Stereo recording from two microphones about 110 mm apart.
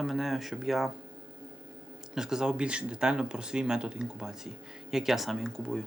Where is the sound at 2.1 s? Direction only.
5° right (ahead or behind).